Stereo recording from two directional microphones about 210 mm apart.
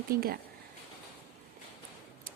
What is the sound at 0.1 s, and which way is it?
Speech, 45° right (ahead or behind).